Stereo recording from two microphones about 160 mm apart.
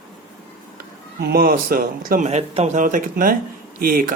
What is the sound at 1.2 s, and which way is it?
Speech, 70° right (ahead or behind).